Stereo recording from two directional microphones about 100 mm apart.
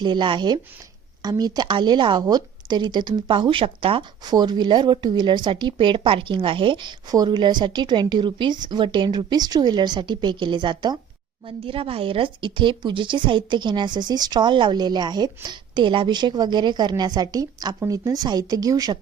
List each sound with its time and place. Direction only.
0.0 s a woman's voice: 50° right (ahead or behind)
4.3 s a woman's voice: 45° right (ahead or behind)
11.4 s a woman's voice: 65° right (ahead or behind); by 18.9 s 40° right (ahead or behind)